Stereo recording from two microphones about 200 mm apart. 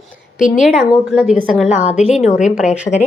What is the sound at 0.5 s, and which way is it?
A woman's voice, centre (ahead or behind).